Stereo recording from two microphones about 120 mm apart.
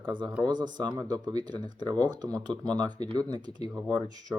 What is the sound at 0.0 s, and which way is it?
Speech, 40° right (ahead or behind).